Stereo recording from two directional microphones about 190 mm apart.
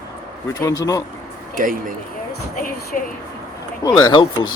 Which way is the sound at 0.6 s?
20° left (ahead or behind).